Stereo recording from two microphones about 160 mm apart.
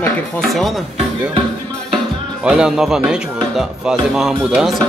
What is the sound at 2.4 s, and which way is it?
Speech, 5° right (ahead or behind).